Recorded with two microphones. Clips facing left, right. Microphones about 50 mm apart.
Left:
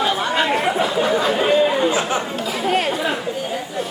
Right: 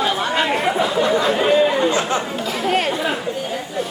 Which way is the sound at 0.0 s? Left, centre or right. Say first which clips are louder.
Even; centre.